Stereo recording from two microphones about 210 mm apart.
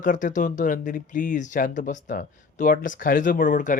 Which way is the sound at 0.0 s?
40° left (ahead or behind).